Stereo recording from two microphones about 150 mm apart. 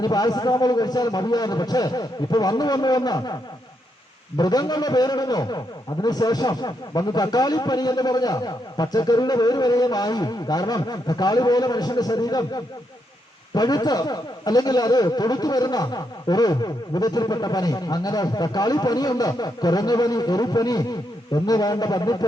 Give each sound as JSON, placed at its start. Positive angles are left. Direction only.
{"t": 0.0, "sound": "a man's voice", "side_deg": 25}
{"t": 4.4, "sound": "a man's voice", "side_deg": 25}
{"t": 13.5, "sound": "a man's voice", "side_deg": 25}